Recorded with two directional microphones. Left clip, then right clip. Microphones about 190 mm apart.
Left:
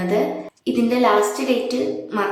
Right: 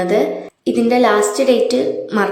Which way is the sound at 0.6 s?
20° right (ahead or behind).